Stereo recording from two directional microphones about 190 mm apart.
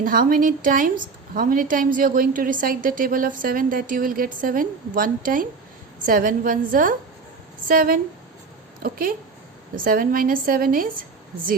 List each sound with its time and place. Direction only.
0.0 s a woman's voice: 50° right (ahead or behind)